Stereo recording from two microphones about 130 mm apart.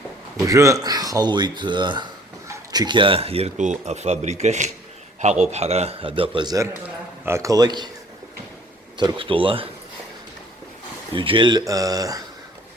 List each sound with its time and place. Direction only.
0.4 s speech: 25° right (ahead or behind); by 3.5 s 50° right (ahead or behind)
3.6 s a man's voice: 65° right (ahead or behind); by 7.9 s 30° right (ahead or behind)
9.0 s a man's voice: 40° right (ahead or behind)
11.1 s speech: 40° right (ahead or behind)